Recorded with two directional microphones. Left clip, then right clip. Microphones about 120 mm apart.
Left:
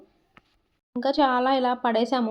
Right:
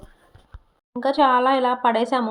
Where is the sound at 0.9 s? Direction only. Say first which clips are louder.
Right 4 dB; 5° right (ahead or behind).